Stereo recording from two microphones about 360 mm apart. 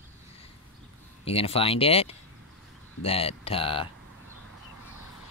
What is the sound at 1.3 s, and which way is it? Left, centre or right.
Speech, centre.